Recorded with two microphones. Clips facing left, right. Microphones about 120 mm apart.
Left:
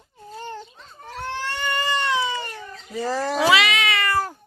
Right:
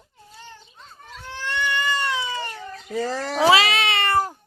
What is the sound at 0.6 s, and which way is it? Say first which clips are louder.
Baby cry: left 5 dB; 80° left.